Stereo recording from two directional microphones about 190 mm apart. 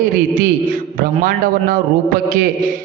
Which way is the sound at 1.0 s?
50° right (ahead or behind).